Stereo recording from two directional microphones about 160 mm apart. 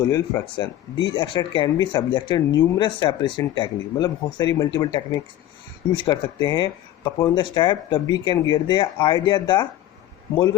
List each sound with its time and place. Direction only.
0.1 s speech: 25° left (ahead or behind)
10.3 s speech: 20° left (ahead or behind)